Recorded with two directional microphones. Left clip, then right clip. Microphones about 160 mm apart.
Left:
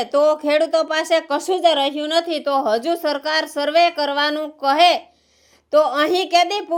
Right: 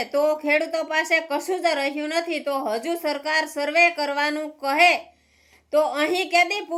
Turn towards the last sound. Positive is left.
turn(degrees=20)  # may be behind; listen again after turning